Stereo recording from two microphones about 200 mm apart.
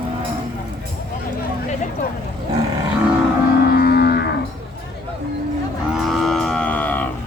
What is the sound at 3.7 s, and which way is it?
Music, 50° left (ahead or behind).